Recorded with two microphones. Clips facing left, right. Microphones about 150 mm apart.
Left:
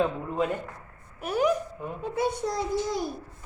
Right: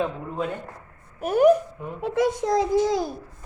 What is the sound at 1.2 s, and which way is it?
Speech, 50° right (ahead or behind).